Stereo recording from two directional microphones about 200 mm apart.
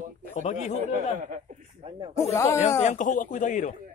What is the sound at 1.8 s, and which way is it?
Speech, 30° right (ahead or behind).